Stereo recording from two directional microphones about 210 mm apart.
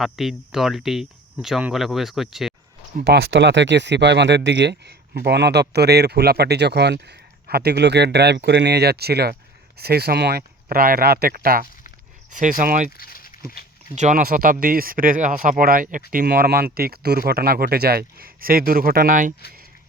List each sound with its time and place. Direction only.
0.0 s speech: centre (ahead or behind)
3.0 s speech: 50° right (ahead or behind)
13.0 s a sound: 45° left (ahead or behind)
13.9 s speech: 35° right (ahead or behind)